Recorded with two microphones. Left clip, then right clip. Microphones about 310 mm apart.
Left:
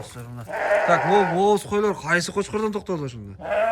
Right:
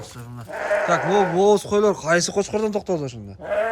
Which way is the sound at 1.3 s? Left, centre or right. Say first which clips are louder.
Right 3 dB; centre.